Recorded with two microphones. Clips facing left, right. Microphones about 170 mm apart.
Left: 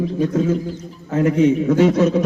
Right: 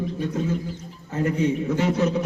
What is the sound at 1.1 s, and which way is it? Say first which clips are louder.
A man's voice: left 7 dB; 90° left.